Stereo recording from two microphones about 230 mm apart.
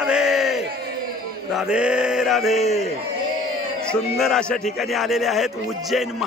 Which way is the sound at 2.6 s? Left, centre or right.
Left.